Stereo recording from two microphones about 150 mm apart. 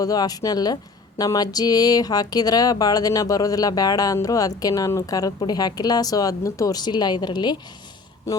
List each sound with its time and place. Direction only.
0.0 s speech: 25° left (ahead or behind)